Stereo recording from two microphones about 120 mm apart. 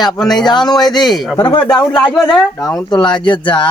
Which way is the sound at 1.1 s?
Centre (ahead or behind).